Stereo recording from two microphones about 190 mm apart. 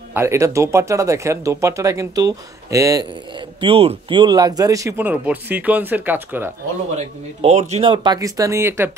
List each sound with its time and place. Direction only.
0.1 s speech: 15° right (ahead or behind)
7.0 s speech: 35° right (ahead or behind); by 8.9 s 15° right (ahead or behind)